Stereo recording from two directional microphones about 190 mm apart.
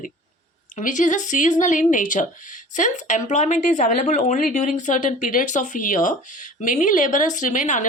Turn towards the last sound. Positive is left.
turn(degrees=40)  # may be behind; listen again after turning